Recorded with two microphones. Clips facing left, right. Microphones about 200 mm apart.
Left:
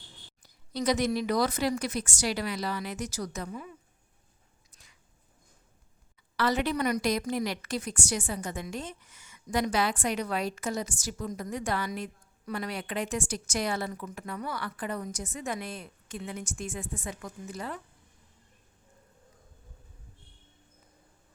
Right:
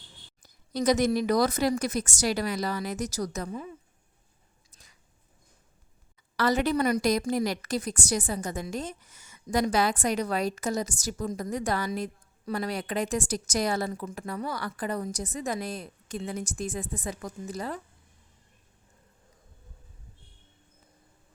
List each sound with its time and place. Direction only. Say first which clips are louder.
0.4 s a woman's voice: right 4 dB; 45° right (ahead or behind)
4.7 s biting: right 2 dB; 40° right (ahead or behind)
6.3 s a woman's voice: right 3 dB; 40° right (ahead or behind)